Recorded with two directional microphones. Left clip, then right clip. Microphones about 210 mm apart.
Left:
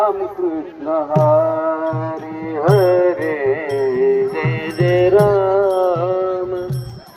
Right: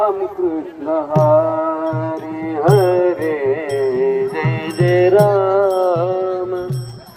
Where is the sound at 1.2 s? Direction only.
30° left (ahead or behind).